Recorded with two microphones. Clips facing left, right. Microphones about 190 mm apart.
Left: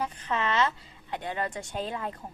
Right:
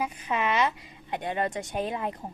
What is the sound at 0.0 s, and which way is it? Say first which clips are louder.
A woman's voice: right 2 dB; 10° right (ahead or behind).